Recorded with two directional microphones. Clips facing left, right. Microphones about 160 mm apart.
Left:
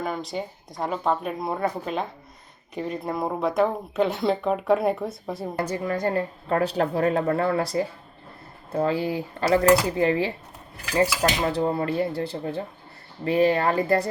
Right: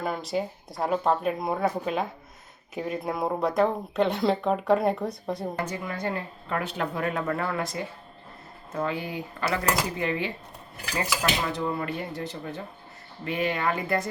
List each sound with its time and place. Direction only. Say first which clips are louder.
0.0 s speech: right 1 dB; centre (ahead or behind)
5.5 s a woman's voice: left 5 dB; 40° left (ahead or behind)